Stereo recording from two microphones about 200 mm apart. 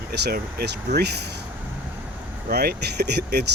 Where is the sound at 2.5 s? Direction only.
50° right (ahead or behind).